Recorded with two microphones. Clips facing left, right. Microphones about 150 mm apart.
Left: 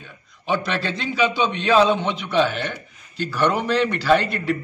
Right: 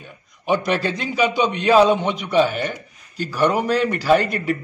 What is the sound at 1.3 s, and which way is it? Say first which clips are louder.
Speech: right 2 dB; 45° right (ahead or behind).